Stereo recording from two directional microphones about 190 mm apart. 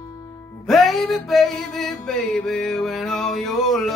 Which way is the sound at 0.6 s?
Centre (ahead or behind).